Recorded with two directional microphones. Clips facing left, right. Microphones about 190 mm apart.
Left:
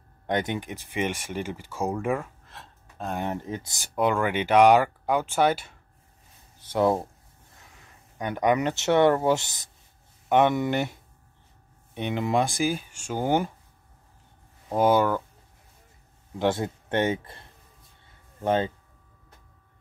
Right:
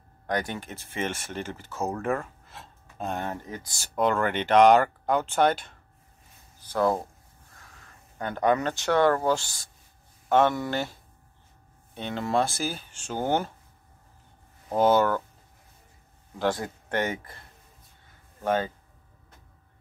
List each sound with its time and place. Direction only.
0.3 s speech: 20° left (ahead or behind)
2.4 s gasp: centre (ahead or behind)
3.2 s speech: 20° left (ahead or behind)
6.6 s speech: 25° left (ahead or behind)
14.7 s speech: 10° left (ahead or behind)
16.3 s speech: 25° left (ahead or behind)